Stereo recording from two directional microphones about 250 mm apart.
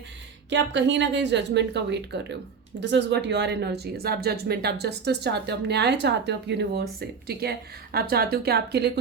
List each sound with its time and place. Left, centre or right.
0.5 s speech: right